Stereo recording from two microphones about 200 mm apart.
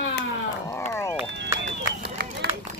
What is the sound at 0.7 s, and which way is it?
Speech, 15° left (ahead or behind).